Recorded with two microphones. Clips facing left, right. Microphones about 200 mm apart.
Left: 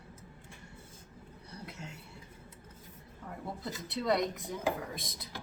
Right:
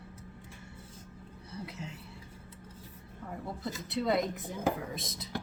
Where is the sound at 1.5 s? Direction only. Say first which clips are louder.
Right 4 dB; centre (ahead or behind).